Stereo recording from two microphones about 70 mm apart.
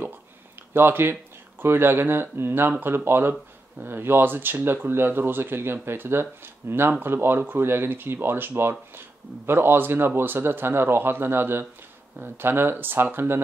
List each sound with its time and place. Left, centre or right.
0.7 s speech: right